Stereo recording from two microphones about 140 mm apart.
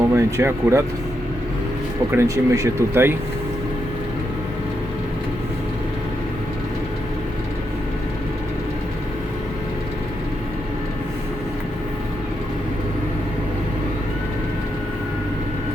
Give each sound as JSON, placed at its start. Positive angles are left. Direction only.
{"t": 0.1, "sound": "speech", "side_deg": -20}
{"t": 2.1, "sound": "speech", "side_deg": -20}